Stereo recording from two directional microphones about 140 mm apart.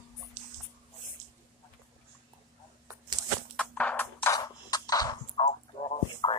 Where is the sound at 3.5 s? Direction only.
10° left (ahead or behind).